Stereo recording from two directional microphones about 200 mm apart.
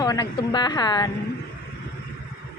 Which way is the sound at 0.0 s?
20° left (ahead or behind).